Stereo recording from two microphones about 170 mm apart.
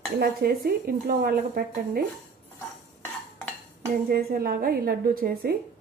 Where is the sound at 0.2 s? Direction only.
60° right (ahead or behind).